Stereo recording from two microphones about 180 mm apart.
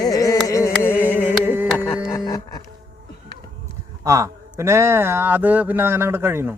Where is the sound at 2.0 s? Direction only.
20° left (ahead or behind).